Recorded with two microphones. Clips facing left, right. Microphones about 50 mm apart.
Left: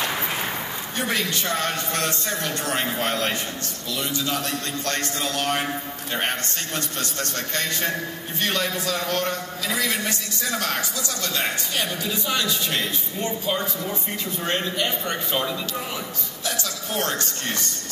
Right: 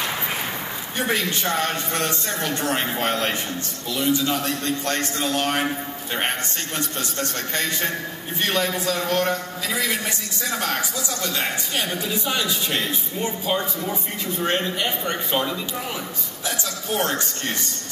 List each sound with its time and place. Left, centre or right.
1.0 s a man's voice: right
7.0 s a man's voice: right
12.3 s a man's voice: centre
16.4 s a sound: centre